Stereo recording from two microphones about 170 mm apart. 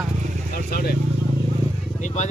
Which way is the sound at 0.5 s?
65° left (ahead or behind).